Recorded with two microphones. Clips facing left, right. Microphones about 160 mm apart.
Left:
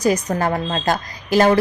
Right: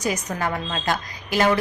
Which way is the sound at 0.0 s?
35° left (ahead or behind).